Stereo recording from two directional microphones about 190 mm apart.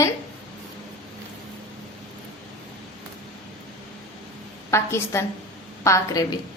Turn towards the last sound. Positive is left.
turn(degrees=15)  # may be behind; listen again after turning